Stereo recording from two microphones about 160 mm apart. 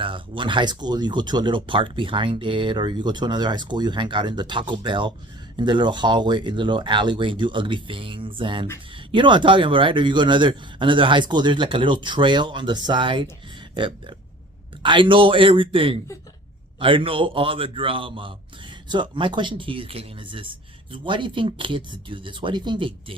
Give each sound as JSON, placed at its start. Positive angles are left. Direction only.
{"t": 0.0, "sound": "speech", "side_deg": -30}